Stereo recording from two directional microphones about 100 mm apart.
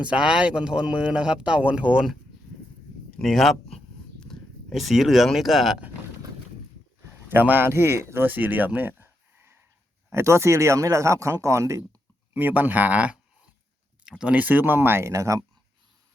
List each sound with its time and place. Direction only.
0.0 s speech: 10° right (ahead or behind)
3.2 s speech: centre (ahead or behind)
7.3 s speech: 20° right (ahead or behind)
12.3 s speech: 20° right (ahead or behind)